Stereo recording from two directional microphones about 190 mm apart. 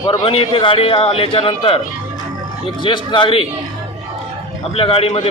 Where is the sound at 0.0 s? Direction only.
25° left (ahead or behind).